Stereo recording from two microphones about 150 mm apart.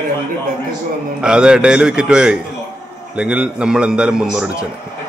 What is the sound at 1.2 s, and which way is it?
A man's voice, 5° right (ahead or behind).